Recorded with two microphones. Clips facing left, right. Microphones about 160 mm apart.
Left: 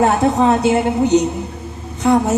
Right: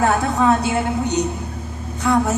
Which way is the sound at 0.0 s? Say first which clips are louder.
Left 4 dB; 25° left (ahead or behind).